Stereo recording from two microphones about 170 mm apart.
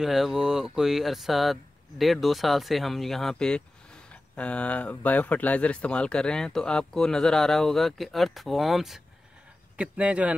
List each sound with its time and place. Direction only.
0.0 s a man's voice: centre (ahead or behind)